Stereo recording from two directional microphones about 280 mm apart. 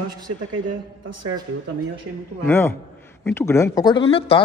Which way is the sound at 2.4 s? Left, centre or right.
Centre.